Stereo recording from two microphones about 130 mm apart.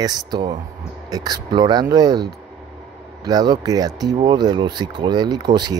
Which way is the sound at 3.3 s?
30° right (ahead or behind).